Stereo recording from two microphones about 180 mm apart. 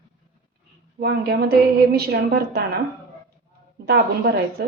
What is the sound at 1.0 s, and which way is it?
A woman's voice, 65° right (ahead or behind).